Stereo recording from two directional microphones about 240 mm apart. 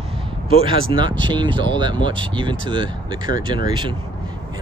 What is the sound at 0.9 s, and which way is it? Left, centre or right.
Speech, centre.